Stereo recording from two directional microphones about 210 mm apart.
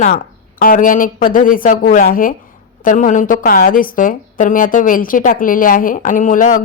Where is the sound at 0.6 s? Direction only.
40° left (ahead or behind).